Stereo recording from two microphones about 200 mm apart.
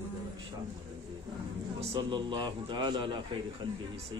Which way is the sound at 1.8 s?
25° right (ahead or behind).